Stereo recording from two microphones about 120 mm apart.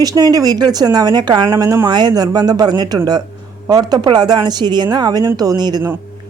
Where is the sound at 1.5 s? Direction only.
25° right (ahead or behind).